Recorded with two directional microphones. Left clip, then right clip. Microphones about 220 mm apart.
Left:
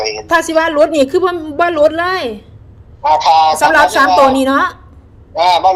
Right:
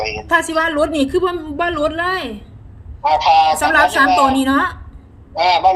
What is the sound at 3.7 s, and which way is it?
A woman's voice, 25° left (ahead or behind).